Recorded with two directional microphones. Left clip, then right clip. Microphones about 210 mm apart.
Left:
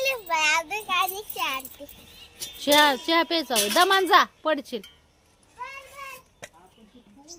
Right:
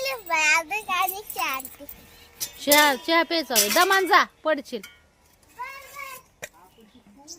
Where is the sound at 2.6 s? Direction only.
Centre (ahead or behind).